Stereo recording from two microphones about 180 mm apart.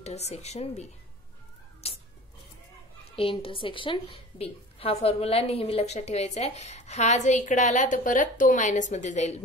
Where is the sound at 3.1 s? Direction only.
30° left (ahead or behind).